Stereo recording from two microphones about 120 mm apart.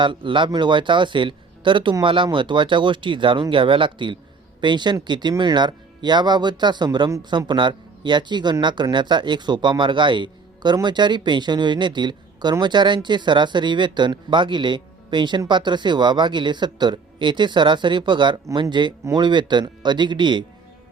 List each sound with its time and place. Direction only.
0.0 s speech: 45° right (ahead or behind)